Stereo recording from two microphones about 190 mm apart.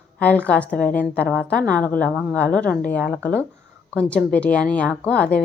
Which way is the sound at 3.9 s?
5° left (ahead or behind).